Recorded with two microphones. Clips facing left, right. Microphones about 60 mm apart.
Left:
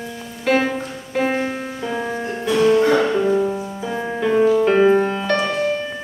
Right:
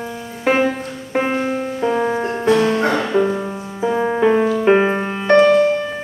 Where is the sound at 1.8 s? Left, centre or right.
Right.